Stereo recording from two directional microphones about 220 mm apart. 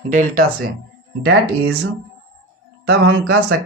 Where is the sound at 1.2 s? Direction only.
50° right (ahead or behind).